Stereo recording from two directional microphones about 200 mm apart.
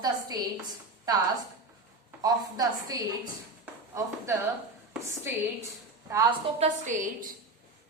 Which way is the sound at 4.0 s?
15° right (ahead or behind).